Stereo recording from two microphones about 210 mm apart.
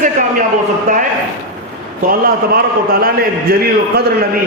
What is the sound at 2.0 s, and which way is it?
A man's voice, 45° right (ahead or behind).